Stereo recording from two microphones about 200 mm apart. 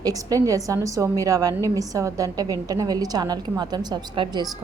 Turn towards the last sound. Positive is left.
turn(degrees=-20)  # may be behind; listen again after turning